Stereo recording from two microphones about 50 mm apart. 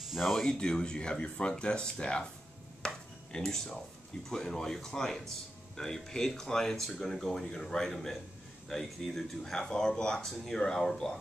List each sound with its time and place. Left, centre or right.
0.0 s a sound: centre
0.3 s speech: centre
2.8 s chopping: centre
4.3 s speech: centre